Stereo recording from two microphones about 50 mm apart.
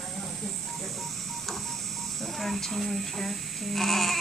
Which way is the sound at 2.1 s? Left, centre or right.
Centre.